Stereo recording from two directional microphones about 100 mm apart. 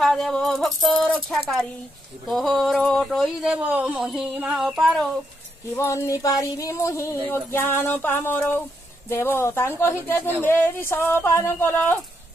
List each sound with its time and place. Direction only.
0.0 s speech: centre (ahead or behind)
0.9 s speech: 15° left (ahead or behind)
2.2 s speech: centre (ahead or behind)
5.8 s speech: 30° left (ahead or behind)